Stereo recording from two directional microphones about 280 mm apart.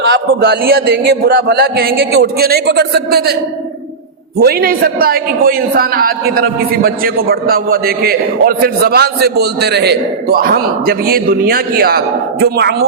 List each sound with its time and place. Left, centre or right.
0.1 s a man's voice: right
4.4 s a man's voice: right